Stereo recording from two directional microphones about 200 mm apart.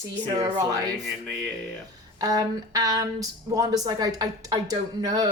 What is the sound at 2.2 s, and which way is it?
Speech, 20° right (ahead or behind).